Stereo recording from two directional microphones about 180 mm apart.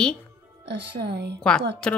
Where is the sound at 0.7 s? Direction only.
65° right (ahead or behind).